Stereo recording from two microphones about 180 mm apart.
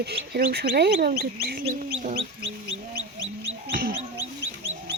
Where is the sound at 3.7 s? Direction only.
55° right (ahead or behind).